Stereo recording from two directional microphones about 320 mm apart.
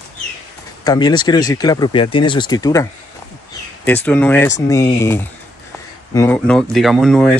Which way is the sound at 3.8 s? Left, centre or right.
Centre.